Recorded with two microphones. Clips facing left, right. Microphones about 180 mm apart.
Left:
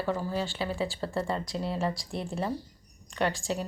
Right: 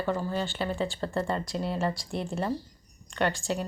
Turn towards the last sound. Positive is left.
turn(degrees=0)  # may be behind; listen again after turning